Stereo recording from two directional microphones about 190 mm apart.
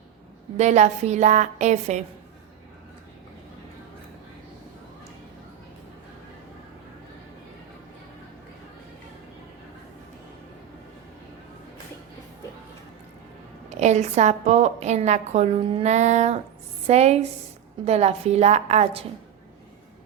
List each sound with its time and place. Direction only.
0.5 s a woman's voice: 35° right (ahead or behind)
13.7 s a woman's voice: 35° right (ahead or behind)